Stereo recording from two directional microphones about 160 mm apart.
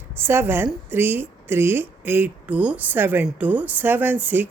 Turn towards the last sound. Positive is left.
turn(degrees=-10)  # may be behind; listen again after turning